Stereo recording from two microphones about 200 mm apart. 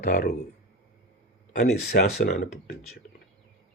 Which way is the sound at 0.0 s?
40° left (ahead or behind).